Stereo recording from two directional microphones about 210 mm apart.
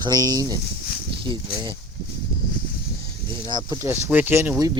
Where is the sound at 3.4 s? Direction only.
20° right (ahead or behind).